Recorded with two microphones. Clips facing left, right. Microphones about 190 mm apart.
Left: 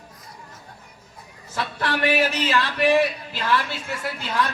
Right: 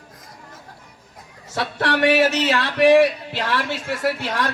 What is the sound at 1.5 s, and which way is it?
Speech, 75° right (ahead or behind).